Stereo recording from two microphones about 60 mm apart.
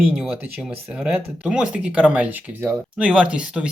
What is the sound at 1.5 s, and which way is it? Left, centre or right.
Speech, centre.